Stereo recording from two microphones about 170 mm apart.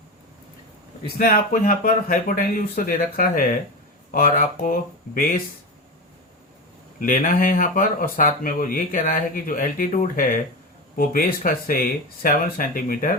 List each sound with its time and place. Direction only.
1.0 s speech: 60° left (ahead or behind)
7.0 s speech: 50° left (ahead or behind)